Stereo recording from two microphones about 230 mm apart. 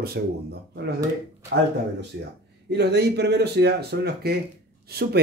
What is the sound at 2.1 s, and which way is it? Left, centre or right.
Speech, right.